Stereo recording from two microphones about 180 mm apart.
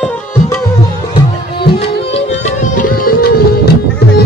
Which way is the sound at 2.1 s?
40° left (ahead or behind).